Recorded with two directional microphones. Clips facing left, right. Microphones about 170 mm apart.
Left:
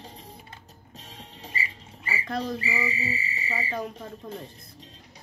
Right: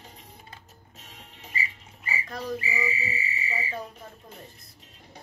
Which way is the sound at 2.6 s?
35° left (ahead or behind).